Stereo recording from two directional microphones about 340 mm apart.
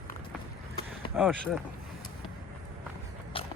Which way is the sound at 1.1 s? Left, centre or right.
Centre.